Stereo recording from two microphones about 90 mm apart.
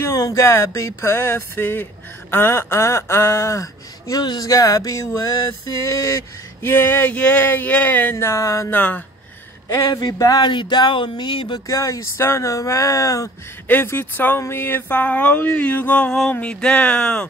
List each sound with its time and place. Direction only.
0.0 s speech: 35° left (ahead or behind)
6.6 s speech: 25° left (ahead or behind)
8.6 s a sound: 20° left (ahead or behind)
9.8 s speech: 45° left (ahead or behind)
11.6 s speech: 35° left (ahead or behind)
13.7 s speech: 25° left (ahead or behind)
14.4 s a sound: 25° left (ahead or behind)